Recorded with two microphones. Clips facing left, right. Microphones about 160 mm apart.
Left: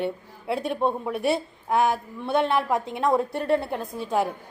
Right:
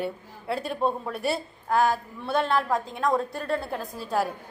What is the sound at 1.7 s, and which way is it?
A woman's voice, 20° left (ahead or behind).